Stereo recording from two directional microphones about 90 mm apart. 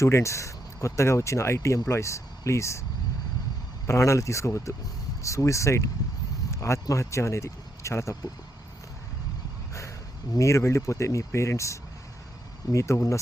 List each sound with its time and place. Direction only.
0.0 s speech: 35° left (ahead or behind)
3.8 s speech: 30° left (ahead or behind)
10.3 s speech: 35° left (ahead or behind)